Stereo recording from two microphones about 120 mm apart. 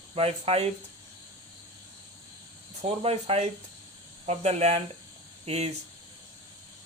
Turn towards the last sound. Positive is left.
turn(degrees=-60)  # may be behind; listen again after turning